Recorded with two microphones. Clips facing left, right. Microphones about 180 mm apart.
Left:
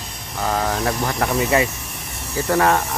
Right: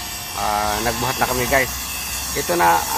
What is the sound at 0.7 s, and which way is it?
Speech, 15° left (ahead or behind).